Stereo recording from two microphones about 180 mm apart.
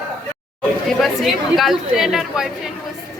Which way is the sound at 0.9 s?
Centre (ahead or behind).